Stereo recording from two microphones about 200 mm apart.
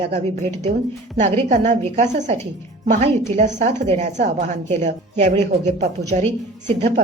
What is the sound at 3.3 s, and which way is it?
Speech, 35° right (ahead or behind).